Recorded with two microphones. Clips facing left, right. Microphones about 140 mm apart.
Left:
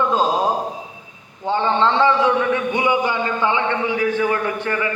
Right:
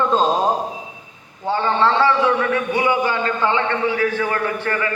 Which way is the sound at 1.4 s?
20° left (ahead or behind).